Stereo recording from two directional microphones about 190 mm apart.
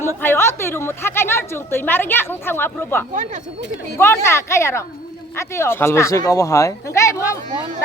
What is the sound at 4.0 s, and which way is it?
A woman's voice, 15° left (ahead or behind).